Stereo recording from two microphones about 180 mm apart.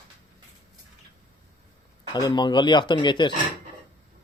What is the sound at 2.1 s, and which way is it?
Speech, 25° left (ahead or behind).